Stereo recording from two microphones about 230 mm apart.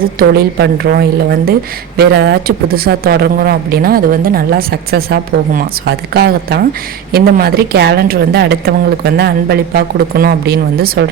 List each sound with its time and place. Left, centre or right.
0.2 s speech: right